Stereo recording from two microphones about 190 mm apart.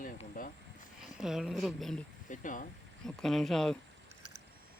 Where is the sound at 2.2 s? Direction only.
40° left (ahead or behind).